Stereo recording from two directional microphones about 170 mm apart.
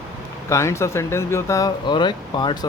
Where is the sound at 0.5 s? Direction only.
15° left (ahead or behind).